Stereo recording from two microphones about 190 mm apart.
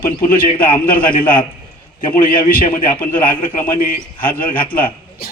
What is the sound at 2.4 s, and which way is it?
A man's voice, 45° left (ahead or behind).